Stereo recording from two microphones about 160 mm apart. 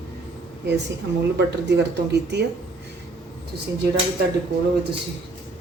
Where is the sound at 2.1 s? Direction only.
90° right.